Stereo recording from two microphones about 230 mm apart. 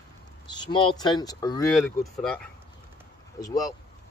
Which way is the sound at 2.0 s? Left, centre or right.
Centre.